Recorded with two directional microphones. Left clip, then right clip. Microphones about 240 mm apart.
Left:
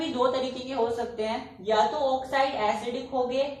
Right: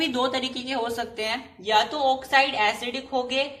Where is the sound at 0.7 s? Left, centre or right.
Centre.